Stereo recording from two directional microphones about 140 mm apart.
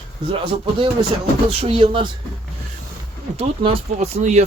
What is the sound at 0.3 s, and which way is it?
Speech, 40° right (ahead or behind).